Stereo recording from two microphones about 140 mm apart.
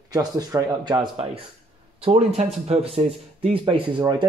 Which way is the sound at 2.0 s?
45° right (ahead or behind).